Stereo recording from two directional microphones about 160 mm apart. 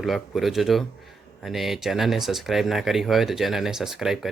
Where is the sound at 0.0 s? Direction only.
Centre (ahead or behind).